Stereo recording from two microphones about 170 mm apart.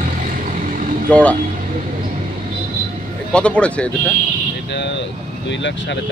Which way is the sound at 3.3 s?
5° left (ahead or behind).